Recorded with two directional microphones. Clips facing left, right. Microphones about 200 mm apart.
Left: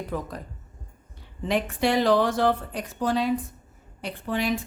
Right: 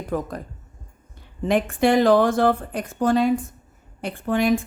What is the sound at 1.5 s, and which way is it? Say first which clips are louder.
A woman's voice: right 5 dB; 50° right (ahead or behind).